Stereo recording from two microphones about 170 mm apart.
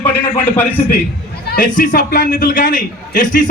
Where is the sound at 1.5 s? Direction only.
50° left (ahead or behind).